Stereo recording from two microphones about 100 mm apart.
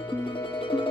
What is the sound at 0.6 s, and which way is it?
Music, 55° left (ahead or behind).